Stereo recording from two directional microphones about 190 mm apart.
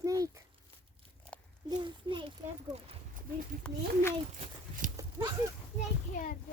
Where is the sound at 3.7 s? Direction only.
5° left (ahead or behind).